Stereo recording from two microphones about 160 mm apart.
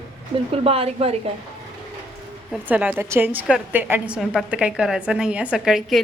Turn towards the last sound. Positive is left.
turn(degrees=0)  # may be behind; listen again after turning